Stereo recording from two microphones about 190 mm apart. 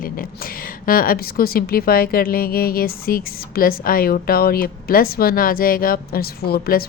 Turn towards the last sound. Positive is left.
turn(degrees=55)  # may be behind; listen again after turning